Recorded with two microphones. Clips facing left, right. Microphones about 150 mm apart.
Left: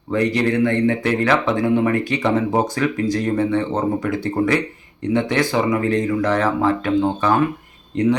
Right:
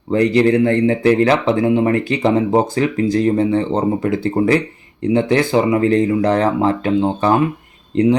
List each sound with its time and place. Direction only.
0.1 s speech: 30° right (ahead or behind)